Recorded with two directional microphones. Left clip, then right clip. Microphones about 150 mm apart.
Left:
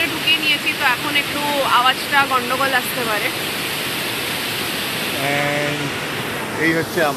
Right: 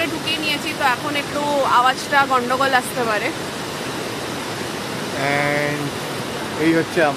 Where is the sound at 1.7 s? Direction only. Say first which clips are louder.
Left 1 dB; 90° right; by 2.8 s 70° right (ahead or behind).